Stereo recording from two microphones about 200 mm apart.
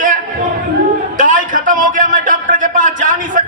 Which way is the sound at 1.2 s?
40° right (ahead or behind).